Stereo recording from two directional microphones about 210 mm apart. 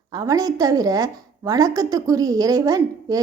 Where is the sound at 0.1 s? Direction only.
15° right (ahead or behind).